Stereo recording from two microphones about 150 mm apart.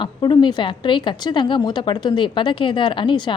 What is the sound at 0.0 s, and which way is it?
A woman's voice, 30° left (ahead or behind).